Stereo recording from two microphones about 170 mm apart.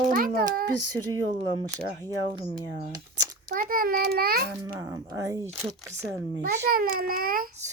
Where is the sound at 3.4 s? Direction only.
55° right (ahead or behind).